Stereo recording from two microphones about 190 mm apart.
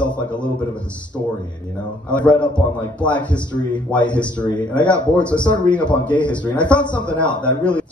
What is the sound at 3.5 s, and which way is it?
Speech, 25° left (ahead or behind).